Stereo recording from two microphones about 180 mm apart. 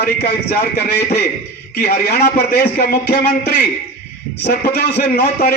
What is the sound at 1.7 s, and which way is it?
A man's voice, 60° left (ahead or behind).